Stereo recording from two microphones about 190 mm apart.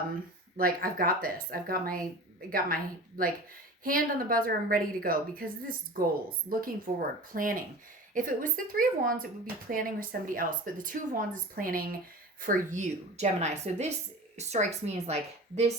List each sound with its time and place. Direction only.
0.5 s speech: 50° right (ahead or behind)
6.5 s a woman's voice: 50° right (ahead or behind)